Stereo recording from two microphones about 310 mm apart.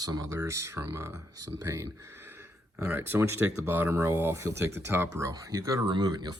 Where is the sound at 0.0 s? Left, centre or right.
Centre.